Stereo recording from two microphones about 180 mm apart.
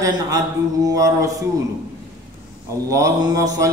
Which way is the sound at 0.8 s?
20° right (ahead or behind).